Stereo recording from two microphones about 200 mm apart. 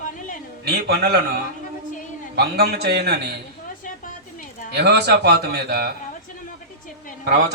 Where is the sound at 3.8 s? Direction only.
40° left (ahead or behind).